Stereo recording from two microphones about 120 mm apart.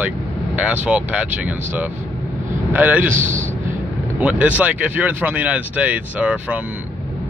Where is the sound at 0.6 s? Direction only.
10° right (ahead or behind).